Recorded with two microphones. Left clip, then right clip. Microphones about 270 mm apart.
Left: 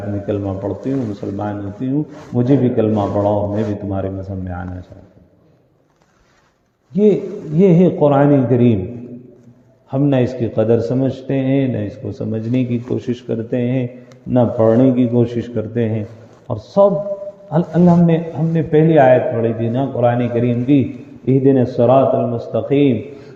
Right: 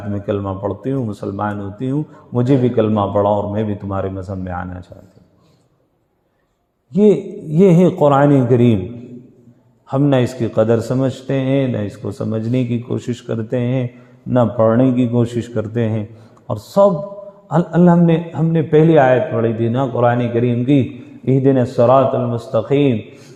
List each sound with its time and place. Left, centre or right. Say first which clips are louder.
0.3 s speech: right 1 dB; right
6.9 s a man's voice: right 1 dB; right
9.9 s speech: right 1 dB; right